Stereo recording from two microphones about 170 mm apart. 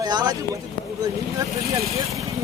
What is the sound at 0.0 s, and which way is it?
Speech, 25° right (ahead or behind).